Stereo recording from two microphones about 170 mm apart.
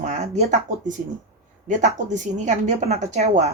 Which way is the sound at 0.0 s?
45° right (ahead or behind).